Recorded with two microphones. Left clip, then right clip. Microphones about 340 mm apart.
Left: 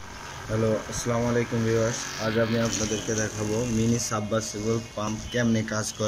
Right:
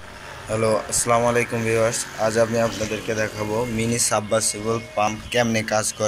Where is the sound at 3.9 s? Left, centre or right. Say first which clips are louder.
Right 6 dB; centre.